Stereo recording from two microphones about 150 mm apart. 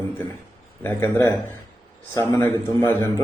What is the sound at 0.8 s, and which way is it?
A man's voice, 15° left (ahead or behind).